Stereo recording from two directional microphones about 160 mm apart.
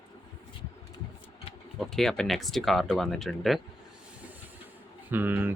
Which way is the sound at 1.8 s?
Centre (ahead or behind).